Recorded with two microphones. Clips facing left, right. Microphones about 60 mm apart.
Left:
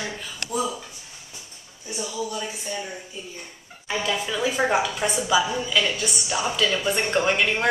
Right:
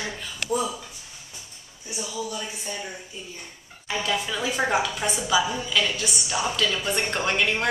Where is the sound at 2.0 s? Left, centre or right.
Centre.